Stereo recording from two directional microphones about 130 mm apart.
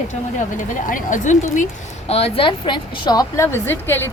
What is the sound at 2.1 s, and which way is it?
A woman's voice, 50° left (ahead or behind).